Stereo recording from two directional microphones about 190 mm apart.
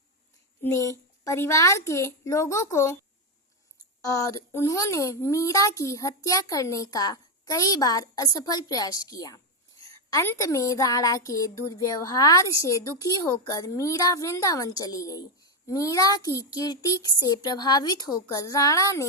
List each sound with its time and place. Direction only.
0.6 s a woman's voice: 15° left (ahead or behind)
4.0 s a woman's voice: 15° left (ahead or behind)